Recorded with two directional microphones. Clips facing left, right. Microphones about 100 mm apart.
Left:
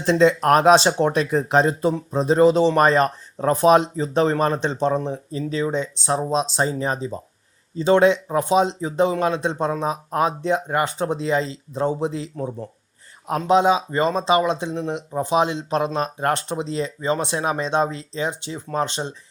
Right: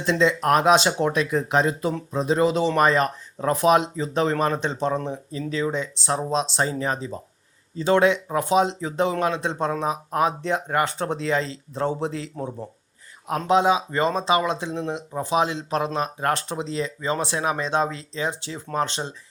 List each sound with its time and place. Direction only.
0.0 s speech: 40° left (ahead or behind); by 12.3 s 20° left (ahead or behind)
13.5 s speech: 25° left (ahead or behind)